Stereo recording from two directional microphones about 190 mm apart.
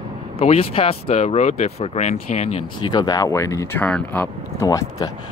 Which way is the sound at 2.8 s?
25° left (ahead or behind).